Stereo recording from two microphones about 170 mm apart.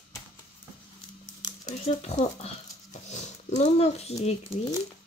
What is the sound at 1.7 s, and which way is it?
Speech, 40° left (ahead or behind).